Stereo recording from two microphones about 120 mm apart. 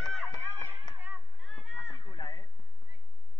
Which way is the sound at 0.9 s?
15° right (ahead or behind).